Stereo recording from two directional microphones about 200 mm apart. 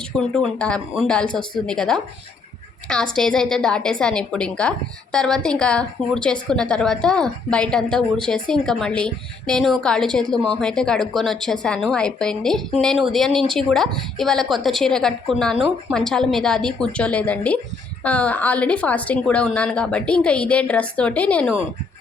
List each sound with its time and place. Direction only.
0.2 s a woman's voice: 5° left (ahead or behind)